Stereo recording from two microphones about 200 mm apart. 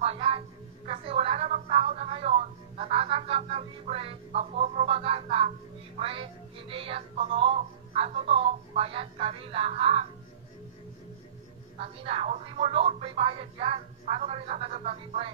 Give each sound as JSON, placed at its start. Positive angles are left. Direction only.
{"t": 0.0, "sound": "a sound", "side_deg": -30}
{"t": 2.8, "sound": "music", "side_deg": -30}
{"t": 12.0, "sound": "music", "side_deg": -30}